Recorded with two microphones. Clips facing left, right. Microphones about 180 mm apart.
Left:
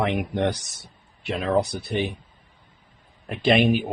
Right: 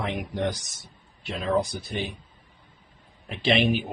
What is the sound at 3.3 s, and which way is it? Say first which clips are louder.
Speech: left 4 dB; 55° left (ahead or behind).